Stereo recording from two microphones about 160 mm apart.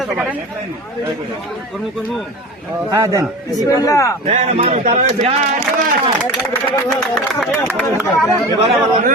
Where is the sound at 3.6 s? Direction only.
20° left (ahead or behind).